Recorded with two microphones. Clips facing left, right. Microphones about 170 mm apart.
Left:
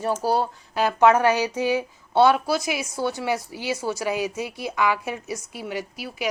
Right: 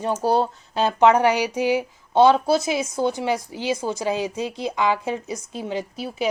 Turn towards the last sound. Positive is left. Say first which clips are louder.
# right 4 dB
turn(degrees=-25)  # may be behind; listen again after turning